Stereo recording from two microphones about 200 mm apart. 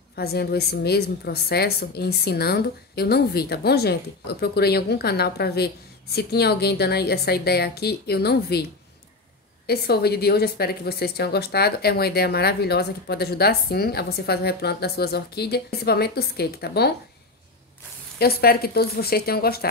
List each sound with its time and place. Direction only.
0.1 s a woman's voice: 55° left (ahead or behind)
9.7 s a woman's voice: 50° left (ahead or behind)
18.2 s a woman's voice: 50° left (ahead or behind)